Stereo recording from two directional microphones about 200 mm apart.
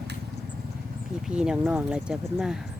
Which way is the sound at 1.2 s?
5° right (ahead or behind).